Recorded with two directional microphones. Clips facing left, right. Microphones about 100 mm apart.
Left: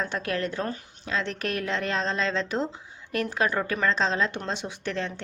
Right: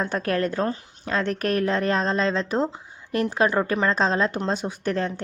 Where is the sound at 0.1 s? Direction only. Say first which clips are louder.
Right 5 dB; 40° right (ahead or behind).